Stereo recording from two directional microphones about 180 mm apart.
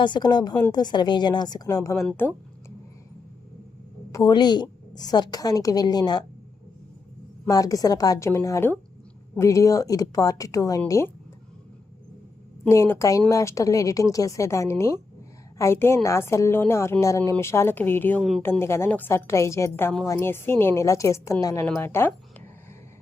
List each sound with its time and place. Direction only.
0.0 s a woman's voice: 25° left (ahead or behind)
4.1 s a woman's voice: 20° left (ahead or behind)
7.4 s a woman's voice: 20° left (ahead or behind)
12.6 s a woman's voice: 15° left (ahead or behind)
18.2 s speech: centre (ahead or behind)
18.4 s a woman's voice: 15° left (ahead or behind)